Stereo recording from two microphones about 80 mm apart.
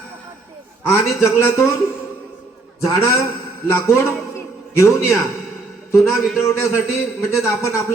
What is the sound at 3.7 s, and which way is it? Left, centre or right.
A man's voice, left.